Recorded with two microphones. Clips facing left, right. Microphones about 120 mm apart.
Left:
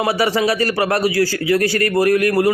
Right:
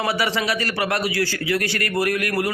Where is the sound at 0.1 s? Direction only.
35° left (ahead or behind).